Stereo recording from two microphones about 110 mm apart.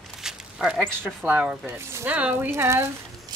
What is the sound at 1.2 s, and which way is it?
Speech, 15° right (ahead or behind).